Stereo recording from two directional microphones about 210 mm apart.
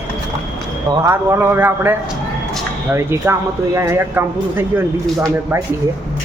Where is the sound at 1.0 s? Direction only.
10° right (ahead or behind).